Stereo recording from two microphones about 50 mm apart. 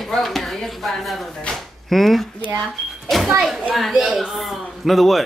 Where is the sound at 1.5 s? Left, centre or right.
Centre.